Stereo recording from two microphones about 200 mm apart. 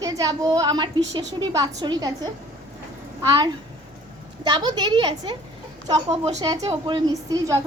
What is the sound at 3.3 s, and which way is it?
A woman's voice, 20° right (ahead or behind).